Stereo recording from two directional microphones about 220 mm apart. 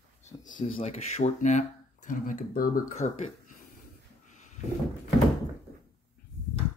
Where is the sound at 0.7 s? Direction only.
30° left (ahead or behind).